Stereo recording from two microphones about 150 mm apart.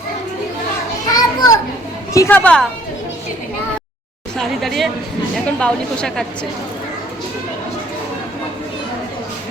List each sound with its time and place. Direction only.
1.1 s children playing: 25° left (ahead or behind)
2.1 s a woman's voice: 15° left (ahead or behind)
4.4 s a woman's voice: centre (ahead or behind)